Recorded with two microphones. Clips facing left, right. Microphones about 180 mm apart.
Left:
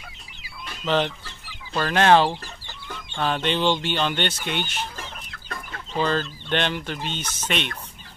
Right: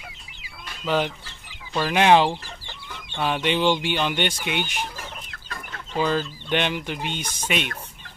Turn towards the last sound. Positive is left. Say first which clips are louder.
# right 1 dB
turn(degrees=-10)  # may be behind; listen again after turning